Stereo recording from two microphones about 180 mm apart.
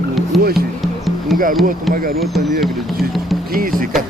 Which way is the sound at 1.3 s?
50° right (ahead or behind).